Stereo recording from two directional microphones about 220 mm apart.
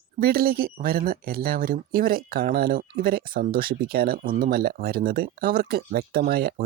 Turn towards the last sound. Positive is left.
turn(degrees=-45)  # may be behind; listen again after turning